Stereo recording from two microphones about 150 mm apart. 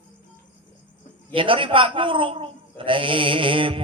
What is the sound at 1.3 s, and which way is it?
A man's voice, 35° right (ahead or behind).